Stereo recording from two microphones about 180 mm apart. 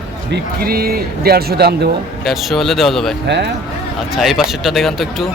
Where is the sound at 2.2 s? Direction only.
Centre (ahead or behind).